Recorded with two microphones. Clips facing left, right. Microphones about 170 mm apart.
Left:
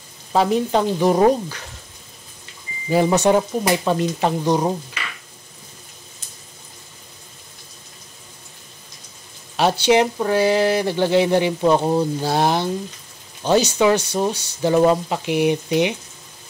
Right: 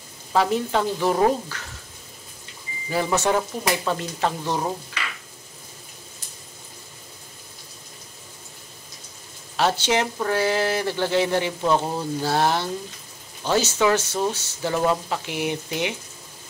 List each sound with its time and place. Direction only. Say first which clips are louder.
0.3 s speech: left 4 dB; 20° left (ahead or behind)
2.9 s speech: left 6 dB; 20° left (ahead or behind)
9.6 s speech: left 6 dB; 15° left (ahead or behind)